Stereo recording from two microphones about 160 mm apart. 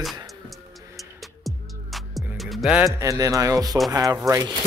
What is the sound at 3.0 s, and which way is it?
Speech, 20° right (ahead or behind).